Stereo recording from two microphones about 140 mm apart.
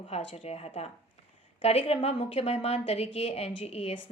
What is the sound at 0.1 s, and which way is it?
A woman's voice, 45° left (ahead or behind).